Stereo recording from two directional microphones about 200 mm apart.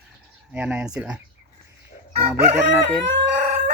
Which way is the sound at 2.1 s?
30° right (ahead or behind).